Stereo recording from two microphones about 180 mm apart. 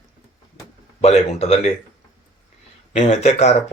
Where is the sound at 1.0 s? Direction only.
35° left (ahead or behind).